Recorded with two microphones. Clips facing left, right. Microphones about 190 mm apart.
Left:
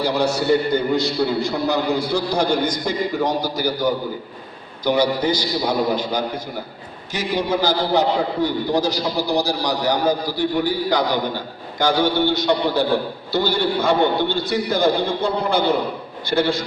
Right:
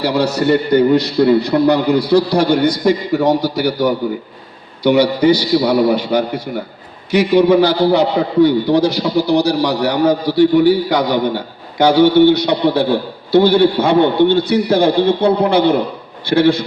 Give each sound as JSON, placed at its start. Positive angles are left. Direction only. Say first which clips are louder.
{"t": 0.0, "sound": "a man's voice", "louder": "right 5 dB", "side_deg": -65}